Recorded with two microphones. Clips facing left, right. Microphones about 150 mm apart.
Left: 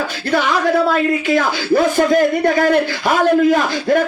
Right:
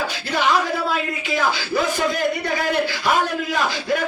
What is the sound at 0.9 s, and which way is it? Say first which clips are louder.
A man's voice: left 8 dB; 50° left (ahead or behind).